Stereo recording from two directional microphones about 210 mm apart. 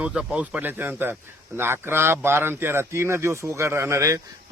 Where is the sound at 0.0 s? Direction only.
5° right (ahead or behind).